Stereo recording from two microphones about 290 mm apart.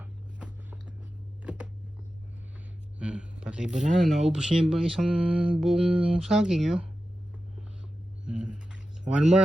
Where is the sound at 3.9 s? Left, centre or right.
Centre.